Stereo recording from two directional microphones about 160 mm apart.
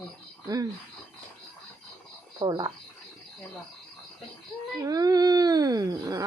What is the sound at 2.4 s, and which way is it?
Speech, 25° right (ahead or behind).